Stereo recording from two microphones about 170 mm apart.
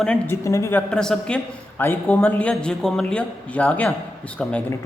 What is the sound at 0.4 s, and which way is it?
Speech, 20° left (ahead or behind).